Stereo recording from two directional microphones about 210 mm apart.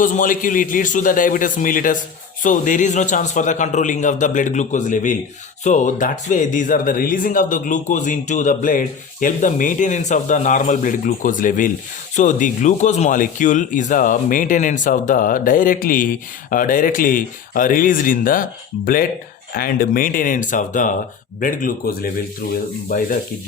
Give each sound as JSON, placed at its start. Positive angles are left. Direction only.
{"t": 0.0, "sound": "speech", "side_deg": 40}
{"t": 19.5, "sound": "speech", "side_deg": 45}